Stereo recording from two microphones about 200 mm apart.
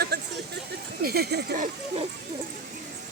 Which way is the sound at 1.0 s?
50° right (ahead or behind).